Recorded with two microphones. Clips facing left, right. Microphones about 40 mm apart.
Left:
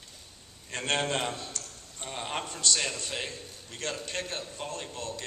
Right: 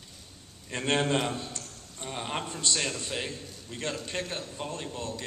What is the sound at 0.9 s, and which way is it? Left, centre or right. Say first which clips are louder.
A man's voice: right 2 dB; centre.